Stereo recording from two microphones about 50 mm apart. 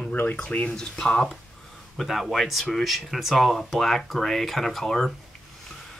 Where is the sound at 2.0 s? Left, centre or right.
Centre.